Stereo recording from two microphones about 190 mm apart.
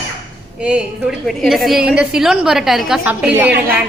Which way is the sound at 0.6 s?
5° right (ahead or behind).